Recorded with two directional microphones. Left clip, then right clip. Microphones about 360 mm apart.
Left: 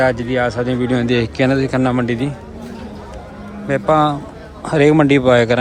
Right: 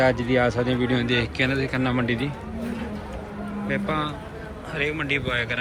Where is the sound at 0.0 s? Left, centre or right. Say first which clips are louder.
Left 5 dB; centre.